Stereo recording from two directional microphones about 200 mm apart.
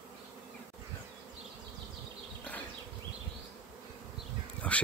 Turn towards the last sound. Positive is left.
turn(degrees=5)  # may be behind; listen again after turning